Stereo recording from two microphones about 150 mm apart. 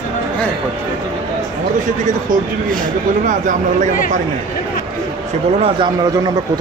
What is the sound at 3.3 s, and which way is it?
Speech, 60° right (ahead or behind).